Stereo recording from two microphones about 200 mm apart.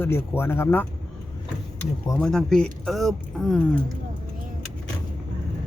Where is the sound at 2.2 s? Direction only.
5° left (ahead or behind).